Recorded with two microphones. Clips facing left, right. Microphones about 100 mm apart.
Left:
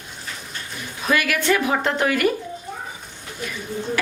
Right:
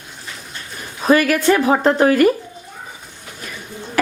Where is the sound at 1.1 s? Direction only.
40° right (ahead or behind).